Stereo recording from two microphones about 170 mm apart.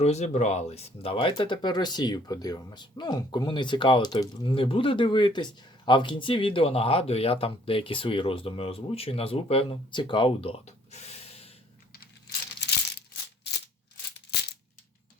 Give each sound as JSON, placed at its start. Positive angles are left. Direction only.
{"t": 0.0, "sound": "speech", "side_deg": 40}